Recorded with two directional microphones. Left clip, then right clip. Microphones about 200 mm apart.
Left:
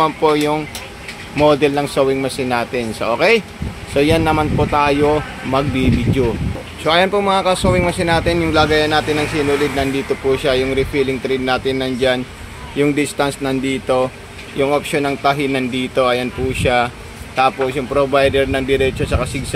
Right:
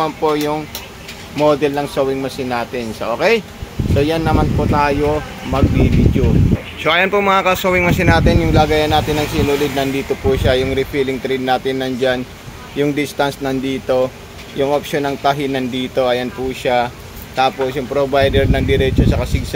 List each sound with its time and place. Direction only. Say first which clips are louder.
0.0 s speech: left 2 dB; 15° left (ahead or behind)
6.8 s speech: even; 5° left (ahead or behind)